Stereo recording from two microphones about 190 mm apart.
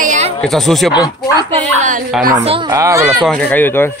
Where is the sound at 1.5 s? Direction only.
40° right (ahead or behind).